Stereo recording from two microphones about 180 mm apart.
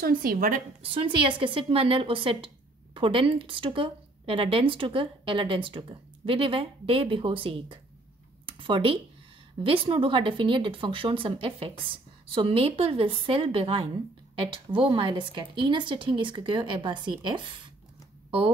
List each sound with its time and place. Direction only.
0.0 s a woman's voice: 55° right (ahead or behind)
0.8 s a woman's voice: 30° right (ahead or behind)